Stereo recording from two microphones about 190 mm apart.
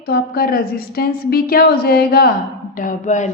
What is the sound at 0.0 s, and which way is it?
A woman's voice, 55° left (ahead or behind).